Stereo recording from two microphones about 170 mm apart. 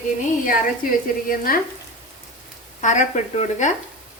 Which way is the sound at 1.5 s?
60° left (ahead or behind).